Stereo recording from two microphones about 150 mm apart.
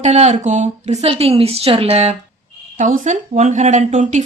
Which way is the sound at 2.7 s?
55° right (ahead or behind).